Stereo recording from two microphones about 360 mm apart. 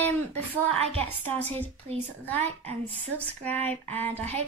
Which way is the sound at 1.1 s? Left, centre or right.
Centre.